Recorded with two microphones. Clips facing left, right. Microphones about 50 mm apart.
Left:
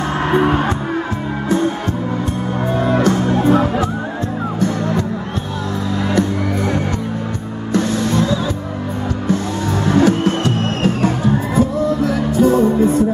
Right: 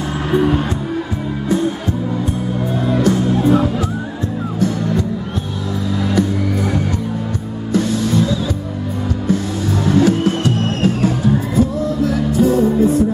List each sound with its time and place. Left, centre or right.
0.3 s music: left
2.7 s music: centre
3.0 s music: centre
4.6 s music: centre
6.1 s music: centre
9.8 s music: centre